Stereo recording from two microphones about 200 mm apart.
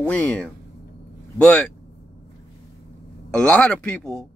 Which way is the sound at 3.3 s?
5° left (ahead or behind).